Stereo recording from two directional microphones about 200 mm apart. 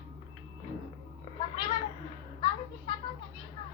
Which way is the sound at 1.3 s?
20° left (ahead or behind).